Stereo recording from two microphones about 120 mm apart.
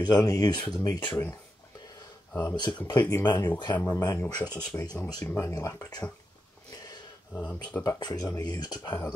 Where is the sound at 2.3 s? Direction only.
15° left (ahead or behind).